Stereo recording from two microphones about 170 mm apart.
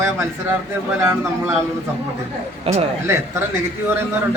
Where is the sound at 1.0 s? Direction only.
15° right (ahead or behind).